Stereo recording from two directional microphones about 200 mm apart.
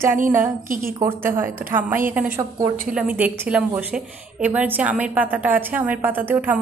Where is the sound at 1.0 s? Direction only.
10° right (ahead or behind).